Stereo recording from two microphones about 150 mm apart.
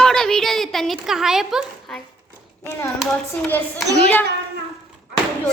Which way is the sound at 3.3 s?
10° left (ahead or behind).